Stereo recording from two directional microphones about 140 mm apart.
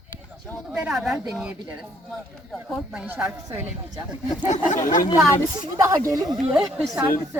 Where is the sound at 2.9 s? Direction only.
10° right (ahead or behind).